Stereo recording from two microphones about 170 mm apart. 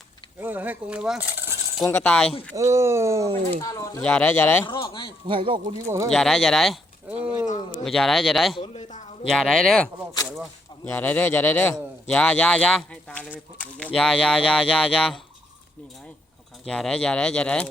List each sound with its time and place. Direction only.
0.3 s speech: 10° right (ahead or behind)
1.8 s a man's voice: 10° left (ahead or behind)
2.6 s speech: 15° right (ahead or behind)
3.5 s speech: 20° left (ahead or behind)
4.0 s a man's voice: 10° left (ahead or behind)
4.6 s speech: 30° left (ahead or behind)
5.3 s speech: 30° right (ahead or behind)
5.8 s speech: 15° right (ahead or behind)
6.1 s speech: 5° left (ahead or behind)
7.4 s a man's voice: 45° left (ahead or behind)
7.9 s speech: centre (ahead or behind)
8.5 s a man's voice: 35° left (ahead or behind)
9.2 s a man's voice: centre (ahead or behind)
16.6 s speech: 5° left (ahead or behind)